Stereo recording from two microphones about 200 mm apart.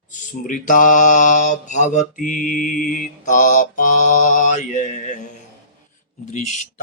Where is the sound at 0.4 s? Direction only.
40° left (ahead or behind).